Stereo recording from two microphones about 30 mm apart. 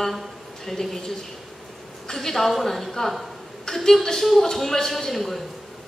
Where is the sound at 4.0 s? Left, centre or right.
Centre.